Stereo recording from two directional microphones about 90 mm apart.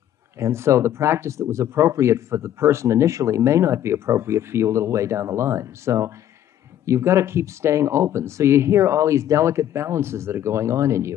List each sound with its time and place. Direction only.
0.4 s speech: 30° right (ahead or behind)